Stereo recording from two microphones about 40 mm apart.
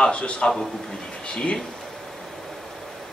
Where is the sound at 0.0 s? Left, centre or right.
Left.